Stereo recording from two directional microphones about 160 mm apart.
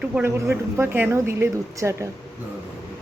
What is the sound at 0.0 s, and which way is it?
Speech, 10° right (ahead or behind).